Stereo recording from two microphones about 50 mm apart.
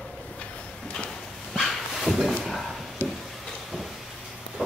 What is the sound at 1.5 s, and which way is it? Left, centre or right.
Dog, centre.